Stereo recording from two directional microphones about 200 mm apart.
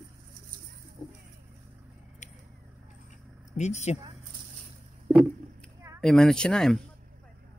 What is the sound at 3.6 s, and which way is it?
Speech, 35° left (ahead or behind).